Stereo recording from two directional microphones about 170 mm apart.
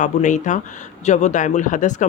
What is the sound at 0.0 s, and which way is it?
Speech, 45° left (ahead or behind).